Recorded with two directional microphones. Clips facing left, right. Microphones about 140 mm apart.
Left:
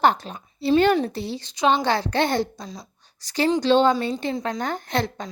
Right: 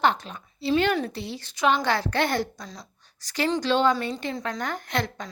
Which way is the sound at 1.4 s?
20° left (ahead or behind).